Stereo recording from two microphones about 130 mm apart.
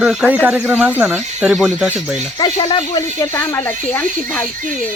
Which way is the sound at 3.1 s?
20° left (ahead or behind).